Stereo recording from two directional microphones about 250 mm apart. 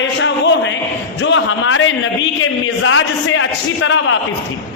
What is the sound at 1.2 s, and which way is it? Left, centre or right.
A man's voice, left.